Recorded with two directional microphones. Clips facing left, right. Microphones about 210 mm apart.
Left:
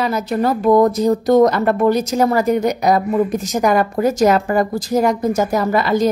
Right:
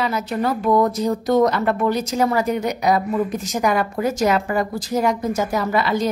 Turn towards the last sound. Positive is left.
turn(degrees=45)  # may be behind; listen again after turning